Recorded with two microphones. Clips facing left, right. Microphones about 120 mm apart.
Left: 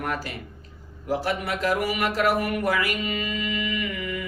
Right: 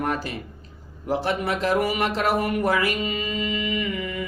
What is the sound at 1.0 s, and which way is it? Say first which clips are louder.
Speech: right 2 dB; 25° right (ahead or behind).